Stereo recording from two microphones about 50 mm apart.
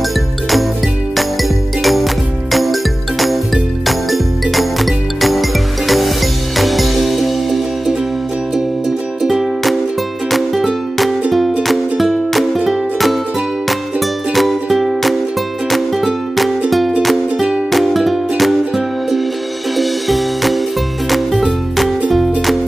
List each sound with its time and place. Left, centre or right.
1.8 s music: centre
9.2 s music: centre
17.6 s music: centre
19.8 s music: centre